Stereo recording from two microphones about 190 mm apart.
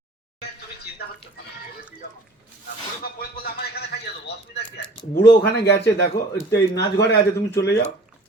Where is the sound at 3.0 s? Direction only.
50° left (ahead or behind).